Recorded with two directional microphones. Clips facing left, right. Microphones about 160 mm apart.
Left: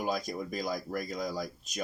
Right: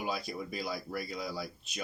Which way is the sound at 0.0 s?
45° left (ahead or behind).